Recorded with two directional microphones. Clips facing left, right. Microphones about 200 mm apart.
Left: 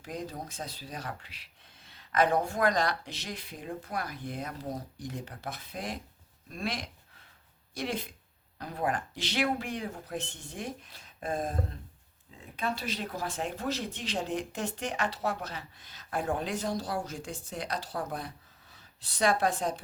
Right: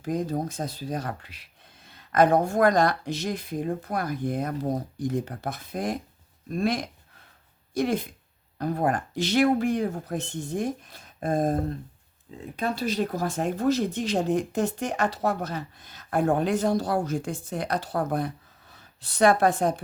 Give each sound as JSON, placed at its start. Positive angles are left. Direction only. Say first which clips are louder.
{"t": 0.0, "sound": "speech", "louder": "right 11 dB", "side_deg": -45}
{"t": 12.5, "sound": "speech", "louder": "right 7 dB", "side_deg": -40}